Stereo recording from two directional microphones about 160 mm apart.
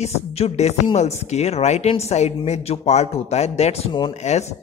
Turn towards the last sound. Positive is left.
turn(degrees=45)  # may be behind; listen again after turning